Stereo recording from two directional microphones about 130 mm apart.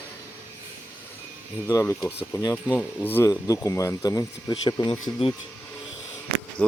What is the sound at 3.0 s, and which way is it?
Speech, 15° left (ahead or behind).